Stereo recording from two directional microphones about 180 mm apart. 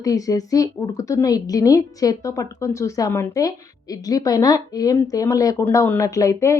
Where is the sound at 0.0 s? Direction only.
20° left (ahead or behind).